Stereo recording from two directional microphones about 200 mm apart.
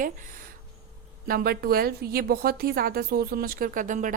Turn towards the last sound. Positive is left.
turn(degrees=-40)  # may be behind; listen again after turning